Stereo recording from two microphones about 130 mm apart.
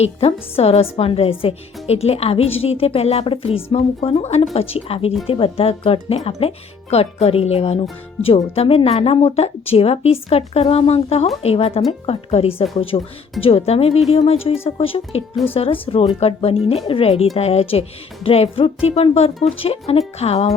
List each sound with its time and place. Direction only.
0.0 s a woman's voice: 50° left (ahead or behind)